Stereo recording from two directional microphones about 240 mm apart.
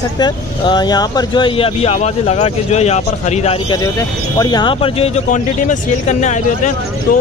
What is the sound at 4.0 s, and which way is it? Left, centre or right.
Speech, centre.